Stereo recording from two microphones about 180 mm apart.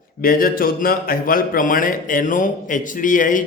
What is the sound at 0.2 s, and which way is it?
Speech, 50° left (ahead or behind).